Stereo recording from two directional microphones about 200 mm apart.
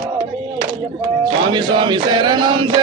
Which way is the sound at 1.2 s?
25° right (ahead or behind).